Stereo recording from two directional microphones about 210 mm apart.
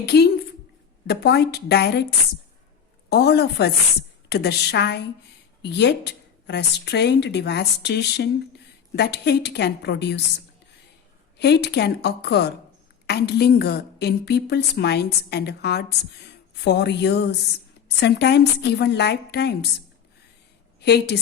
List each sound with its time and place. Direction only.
0.0 s a woman's voice: 50° left (ahead or behind)
11.3 s a woman's voice: 50° left (ahead or behind)
20.8 s a woman's voice: 50° left (ahead or behind)